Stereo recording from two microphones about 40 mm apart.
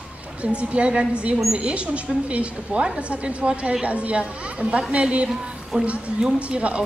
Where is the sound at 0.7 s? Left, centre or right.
Right.